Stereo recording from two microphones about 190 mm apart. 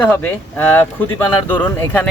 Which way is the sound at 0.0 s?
5° left (ahead or behind).